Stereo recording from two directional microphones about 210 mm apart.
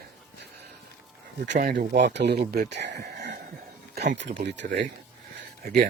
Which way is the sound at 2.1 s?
50° right (ahead or behind).